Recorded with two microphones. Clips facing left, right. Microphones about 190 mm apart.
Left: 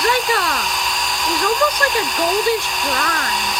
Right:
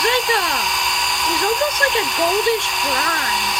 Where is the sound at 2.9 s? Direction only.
45° left (ahead or behind).